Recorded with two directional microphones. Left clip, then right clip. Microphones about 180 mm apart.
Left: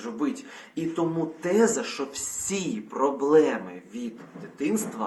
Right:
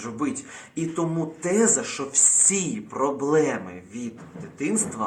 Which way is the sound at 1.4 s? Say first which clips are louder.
Right 1 dB; 15° right (ahead or behind).